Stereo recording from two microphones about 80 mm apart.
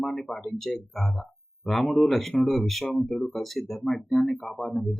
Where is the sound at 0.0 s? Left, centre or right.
Centre.